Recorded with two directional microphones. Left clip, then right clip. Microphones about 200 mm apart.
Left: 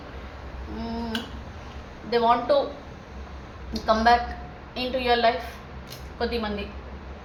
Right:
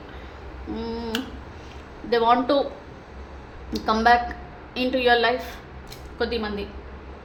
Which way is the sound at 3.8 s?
50° right (ahead or behind).